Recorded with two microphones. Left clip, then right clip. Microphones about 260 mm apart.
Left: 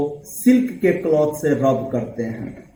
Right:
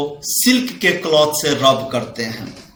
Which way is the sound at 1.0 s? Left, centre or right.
Right.